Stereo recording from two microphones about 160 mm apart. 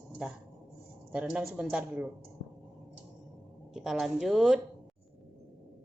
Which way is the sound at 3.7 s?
Centre (ahead or behind).